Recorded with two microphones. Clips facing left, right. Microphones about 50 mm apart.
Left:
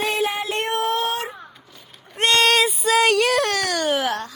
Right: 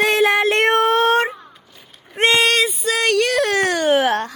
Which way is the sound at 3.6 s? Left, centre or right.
Right.